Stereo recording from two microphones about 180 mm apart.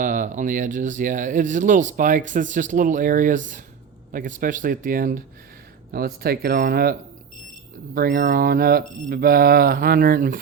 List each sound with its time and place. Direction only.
0.0 s speech: 45° right (ahead or behind)
7.9 s speech: 50° right (ahead or behind)